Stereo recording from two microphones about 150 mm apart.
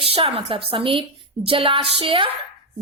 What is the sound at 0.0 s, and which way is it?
A woman's voice, 40° right (ahead or behind).